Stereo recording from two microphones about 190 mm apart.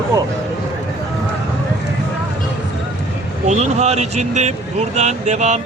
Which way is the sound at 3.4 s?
35° right (ahead or behind).